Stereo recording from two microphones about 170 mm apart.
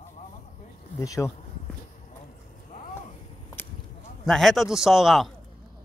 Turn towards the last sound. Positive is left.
turn(degrees=0)  # may be behind; listen again after turning